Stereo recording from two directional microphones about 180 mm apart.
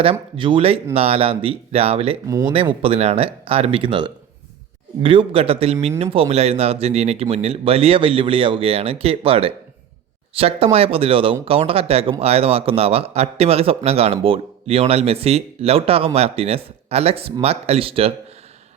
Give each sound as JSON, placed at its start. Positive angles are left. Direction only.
{"t": 0.0, "sound": "speech", "side_deg": -30}
{"t": 2.2, "sound": "speech", "side_deg": -15}
{"t": 2.5, "sound": "speech", "side_deg": -30}